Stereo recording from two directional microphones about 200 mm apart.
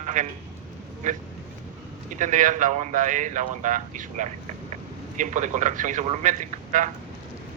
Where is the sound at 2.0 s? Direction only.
40° right (ahead or behind).